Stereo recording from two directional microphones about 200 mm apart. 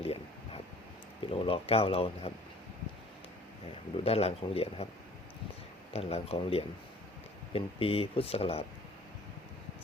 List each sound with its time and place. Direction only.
0.0 s a sound: 30° left (ahead or behind)
1.3 s speech: 30° left (ahead or behind)
3.9 s speech: 30° left (ahead or behind)
5.9 s speech: 30° left (ahead or behind)